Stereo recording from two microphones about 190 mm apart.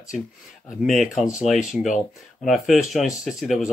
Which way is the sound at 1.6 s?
40° left (ahead or behind).